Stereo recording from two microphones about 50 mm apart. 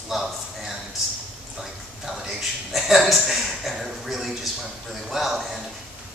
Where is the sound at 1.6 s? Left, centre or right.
Centre.